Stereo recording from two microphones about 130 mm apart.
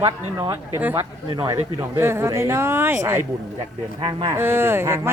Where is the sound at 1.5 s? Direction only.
20° right (ahead or behind).